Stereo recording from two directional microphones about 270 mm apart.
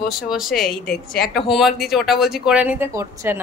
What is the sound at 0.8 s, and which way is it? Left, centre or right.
Speech, left.